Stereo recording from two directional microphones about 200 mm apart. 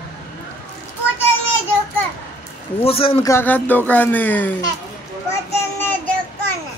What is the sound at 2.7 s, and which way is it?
Speech, 30° left (ahead or behind).